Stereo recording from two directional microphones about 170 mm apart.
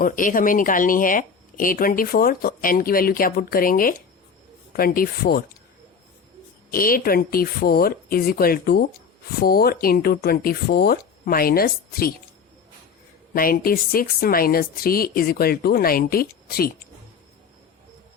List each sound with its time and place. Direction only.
0.0 s speech: 55° left (ahead or behind)
6.7 s speech: 55° left (ahead or behind)
13.3 s speech: 60° left (ahead or behind)